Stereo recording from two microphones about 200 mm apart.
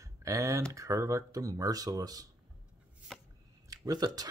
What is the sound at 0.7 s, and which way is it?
Speech, 15° right (ahead or behind).